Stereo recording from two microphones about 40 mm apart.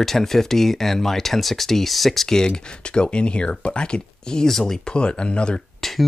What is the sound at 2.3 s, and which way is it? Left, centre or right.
Speech, centre.